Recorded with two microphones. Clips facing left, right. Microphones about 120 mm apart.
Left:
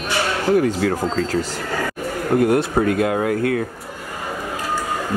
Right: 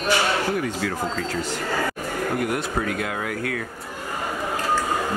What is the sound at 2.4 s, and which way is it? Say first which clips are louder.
Speech: left 8 dB; 30° left (ahead or behind).